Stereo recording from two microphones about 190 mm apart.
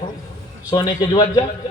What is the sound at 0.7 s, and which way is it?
Speech, 20° left (ahead or behind).